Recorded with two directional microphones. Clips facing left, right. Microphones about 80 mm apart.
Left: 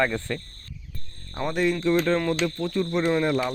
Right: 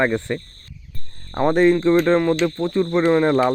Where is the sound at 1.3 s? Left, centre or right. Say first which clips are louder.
Right 9 dB; right.